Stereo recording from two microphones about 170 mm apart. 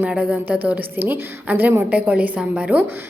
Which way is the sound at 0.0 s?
5° right (ahead or behind).